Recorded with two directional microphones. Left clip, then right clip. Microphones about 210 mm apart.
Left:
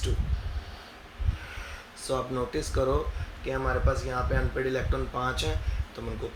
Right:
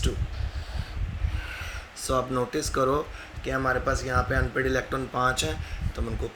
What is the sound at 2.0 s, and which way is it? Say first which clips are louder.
Speech: right 4 dB; 35° right (ahead or behind).